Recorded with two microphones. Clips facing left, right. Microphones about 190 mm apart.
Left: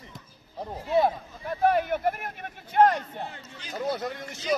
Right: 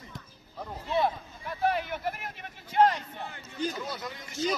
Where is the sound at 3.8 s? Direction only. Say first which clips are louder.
Left 8 dB; 55° left (ahead or behind).